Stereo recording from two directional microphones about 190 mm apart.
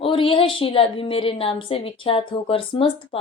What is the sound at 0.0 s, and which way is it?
A woman's voice, 30° left (ahead or behind).